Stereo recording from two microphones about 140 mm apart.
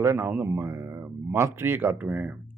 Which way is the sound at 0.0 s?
20° right (ahead or behind).